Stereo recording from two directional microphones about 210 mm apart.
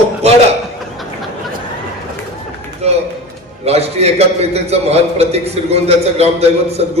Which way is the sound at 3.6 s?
30° right (ahead or behind).